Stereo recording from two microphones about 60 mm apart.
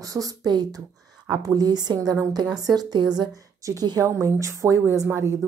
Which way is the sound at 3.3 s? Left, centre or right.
Right.